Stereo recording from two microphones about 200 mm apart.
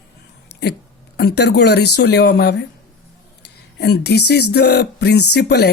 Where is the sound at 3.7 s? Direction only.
55° left (ahead or behind).